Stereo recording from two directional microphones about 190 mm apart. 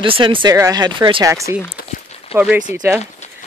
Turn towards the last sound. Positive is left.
turn(degrees=-10)  # may be behind; listen again after turning